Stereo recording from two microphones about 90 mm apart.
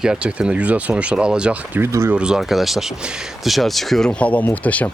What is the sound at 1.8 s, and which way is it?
Speech, 25° right (ahead or behind).